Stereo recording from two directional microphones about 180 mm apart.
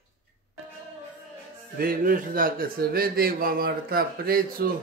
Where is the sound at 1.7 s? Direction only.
55° right (ahead or behind).